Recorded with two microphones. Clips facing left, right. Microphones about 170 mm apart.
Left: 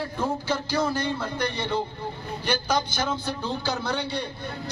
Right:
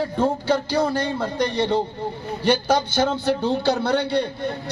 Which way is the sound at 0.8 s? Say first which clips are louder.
Right 4 dB; 60° right (ahead or behind).